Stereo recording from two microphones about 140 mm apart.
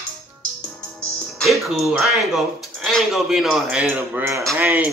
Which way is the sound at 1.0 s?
5° left (ahead or behind).